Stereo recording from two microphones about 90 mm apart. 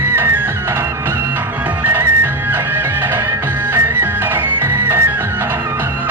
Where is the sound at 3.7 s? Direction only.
25° right (ahead or behind).